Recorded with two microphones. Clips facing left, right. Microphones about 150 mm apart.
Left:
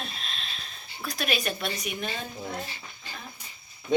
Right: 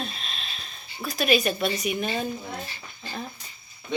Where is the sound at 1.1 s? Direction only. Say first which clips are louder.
Right 7 dB; centre (ahead or behind).